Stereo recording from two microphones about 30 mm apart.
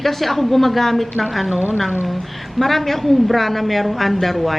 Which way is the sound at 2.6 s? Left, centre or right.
Centre.